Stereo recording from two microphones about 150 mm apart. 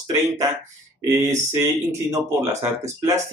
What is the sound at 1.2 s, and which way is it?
Speech, 20° right (ahead or behind).